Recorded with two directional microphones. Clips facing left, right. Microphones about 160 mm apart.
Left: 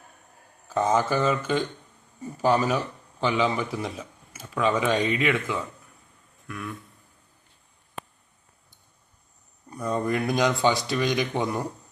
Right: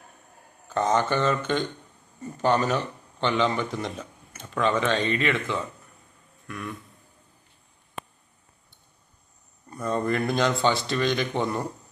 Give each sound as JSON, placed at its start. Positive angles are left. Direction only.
{"t": 0.7, "sound": "a man's voice", "side_deg": 5}
{"t": 9.6, "sound": "a man's voice", "side_deg": 10}